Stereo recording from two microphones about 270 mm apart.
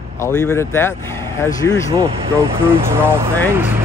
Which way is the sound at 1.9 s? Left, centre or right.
Centre.